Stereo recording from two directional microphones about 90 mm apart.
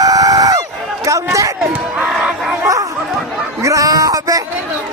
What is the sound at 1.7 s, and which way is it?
Crowd, 15° right (ahead or behind).